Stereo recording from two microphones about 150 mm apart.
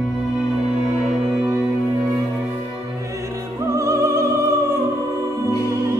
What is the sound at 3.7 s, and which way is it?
Opera, 20° right (ahead or behind).